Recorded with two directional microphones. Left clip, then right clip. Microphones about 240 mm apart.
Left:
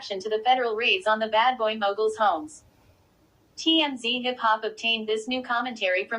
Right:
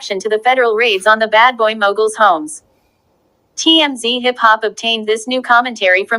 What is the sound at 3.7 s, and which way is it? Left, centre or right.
Speech, right.